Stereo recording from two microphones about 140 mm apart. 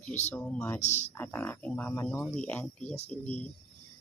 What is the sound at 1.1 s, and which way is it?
Speech, 15° left (ahead or behind).